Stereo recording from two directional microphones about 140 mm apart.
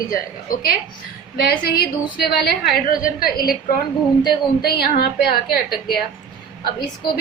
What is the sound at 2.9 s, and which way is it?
Speech, 85° left.